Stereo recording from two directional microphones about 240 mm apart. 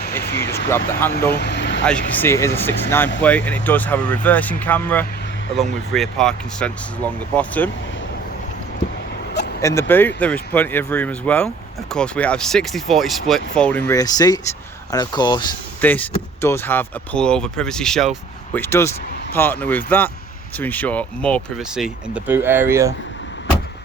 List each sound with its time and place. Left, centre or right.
0.7 s speech: centre
1.4 s vehicle: left
1.8 s speech: centre
9.6 s speech: centre
15.8 s speech: centre